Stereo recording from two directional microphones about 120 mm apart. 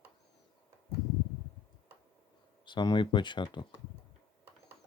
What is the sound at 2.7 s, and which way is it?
Speech, 40° left (ahead or behind).